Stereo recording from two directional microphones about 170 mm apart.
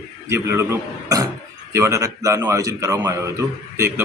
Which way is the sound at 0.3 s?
15° right (ahead or behind).